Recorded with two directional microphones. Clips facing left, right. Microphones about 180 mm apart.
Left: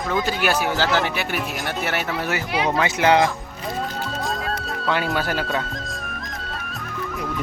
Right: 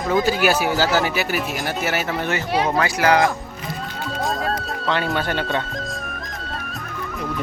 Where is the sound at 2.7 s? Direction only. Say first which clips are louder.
Left 1 dB; 20° left (ahead or behind).